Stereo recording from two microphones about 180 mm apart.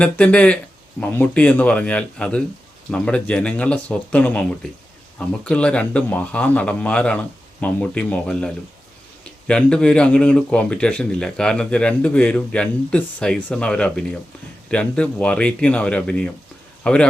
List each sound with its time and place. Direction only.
0.0 s a man's voice: 5° left (ahead or behind)